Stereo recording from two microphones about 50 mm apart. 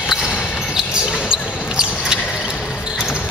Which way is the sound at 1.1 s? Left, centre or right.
Centre.